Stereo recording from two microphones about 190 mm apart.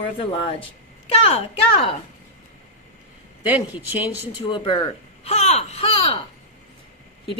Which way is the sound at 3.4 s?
10° right (ahead or behind).